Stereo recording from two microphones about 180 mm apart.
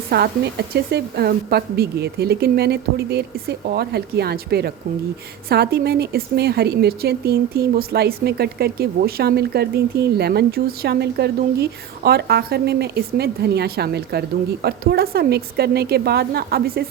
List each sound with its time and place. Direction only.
0.1 s a woman's voice: 60° right (ahead or behind)